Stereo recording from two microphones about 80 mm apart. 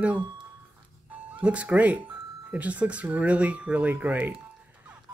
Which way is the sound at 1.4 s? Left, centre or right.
Centre.